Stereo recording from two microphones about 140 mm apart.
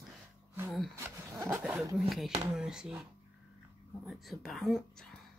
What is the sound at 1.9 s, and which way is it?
Speech, centre (ahead or behind).